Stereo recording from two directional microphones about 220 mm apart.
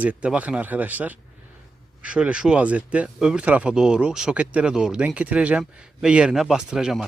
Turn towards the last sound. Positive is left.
turn(degrees=-5)  # may be behind; listen again after turning